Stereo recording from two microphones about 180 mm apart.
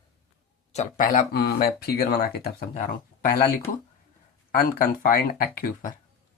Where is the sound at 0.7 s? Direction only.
45° left (ahead or behind); by 2.6 s 60° left (ahead or behind).